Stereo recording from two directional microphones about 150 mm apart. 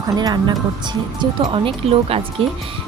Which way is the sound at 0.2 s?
30° right (ahead or behind).